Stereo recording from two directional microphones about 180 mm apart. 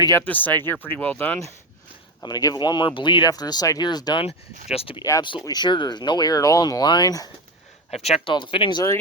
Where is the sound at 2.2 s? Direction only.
20° left (ahead or behind).